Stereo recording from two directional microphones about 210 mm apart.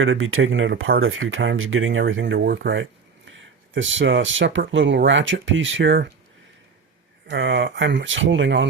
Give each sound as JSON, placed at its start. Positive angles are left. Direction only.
{"t": 0.0, "sound": "speech", "side_deg": -70}
{"t": 7.3, "sound": "speech", "side_deg": -60}